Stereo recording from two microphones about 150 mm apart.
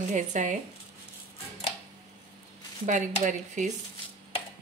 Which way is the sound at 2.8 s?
55° right (ahead or behind).